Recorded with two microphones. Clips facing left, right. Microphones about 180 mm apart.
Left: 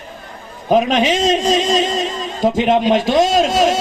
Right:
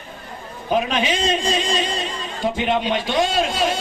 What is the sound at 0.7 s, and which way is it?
A man's voice, 40° left (ahead or behind).